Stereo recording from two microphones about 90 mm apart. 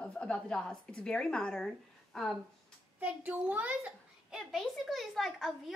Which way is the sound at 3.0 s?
15° right (ahead or behind).